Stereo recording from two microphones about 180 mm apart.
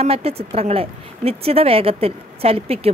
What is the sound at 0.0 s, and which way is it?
Speech, 35° right (ahead or behind).